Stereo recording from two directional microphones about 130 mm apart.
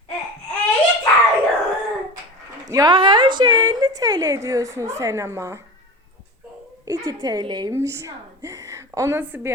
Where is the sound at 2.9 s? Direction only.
40° right (ahead or behind); by 5.6 s 20° right (ahead or behind).